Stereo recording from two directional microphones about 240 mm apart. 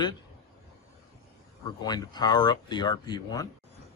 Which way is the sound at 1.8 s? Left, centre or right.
Centre.